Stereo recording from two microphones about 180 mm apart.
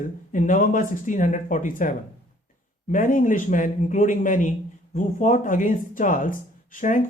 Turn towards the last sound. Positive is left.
turn(degrees=45)  # may be behind; listen again after turning